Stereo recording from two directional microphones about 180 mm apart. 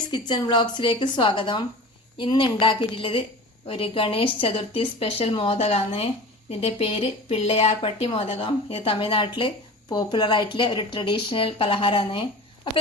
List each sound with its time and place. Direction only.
0.1 s a woman's voice: 25° left (ahead or behind)